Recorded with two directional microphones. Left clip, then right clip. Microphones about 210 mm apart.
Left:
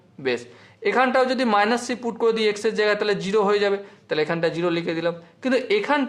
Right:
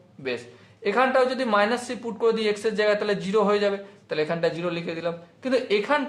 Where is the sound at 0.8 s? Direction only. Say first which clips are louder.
Left 2 dB; 40° left (ahead or behind).